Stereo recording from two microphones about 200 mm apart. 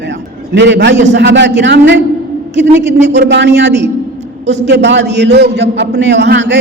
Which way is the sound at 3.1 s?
60° right (ahead or behind).